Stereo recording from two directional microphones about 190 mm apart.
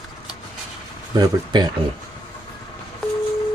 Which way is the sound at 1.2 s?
20° right (ahead or behind).